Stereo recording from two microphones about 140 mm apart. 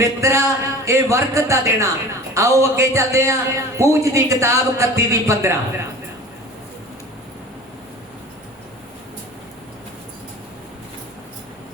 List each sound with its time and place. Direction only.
0.0 s a man's voice: 20° right (ahead or behind)